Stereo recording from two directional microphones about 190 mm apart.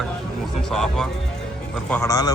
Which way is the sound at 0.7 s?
Centre (ahead or behind).